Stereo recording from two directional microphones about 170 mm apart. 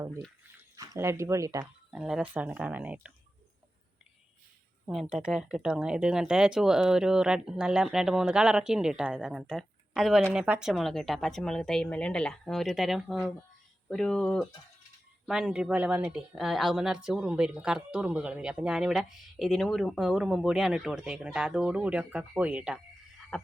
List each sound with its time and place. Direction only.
0.8 s speech: 15° right (ahead or behind)
1.9 s speech: 5° right (ahead or behind)
4.9 s speech: centre (ahead or behind)
23.3 s a sound: centre (ahead or behind)